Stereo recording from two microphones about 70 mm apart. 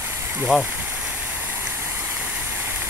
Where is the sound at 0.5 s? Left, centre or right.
Centre.